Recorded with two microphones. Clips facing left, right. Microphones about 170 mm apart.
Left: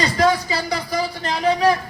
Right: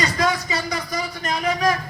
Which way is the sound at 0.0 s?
30° left (ahead or behind).